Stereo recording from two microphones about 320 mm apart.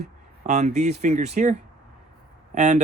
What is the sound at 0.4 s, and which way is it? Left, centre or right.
Speech, right.